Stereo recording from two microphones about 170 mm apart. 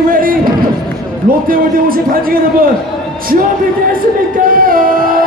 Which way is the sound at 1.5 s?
55° right (ahead or behind).